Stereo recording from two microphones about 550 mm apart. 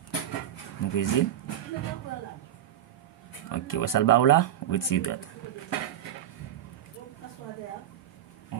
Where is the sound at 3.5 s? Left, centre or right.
Left.